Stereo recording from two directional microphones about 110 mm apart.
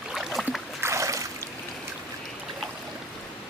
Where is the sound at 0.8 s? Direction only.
25° right (ahead or behind).